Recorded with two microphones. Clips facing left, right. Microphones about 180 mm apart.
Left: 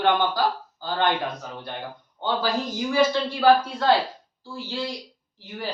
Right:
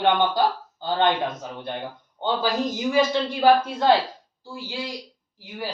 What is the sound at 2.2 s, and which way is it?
A man's voice, 20° right (ahead or behind).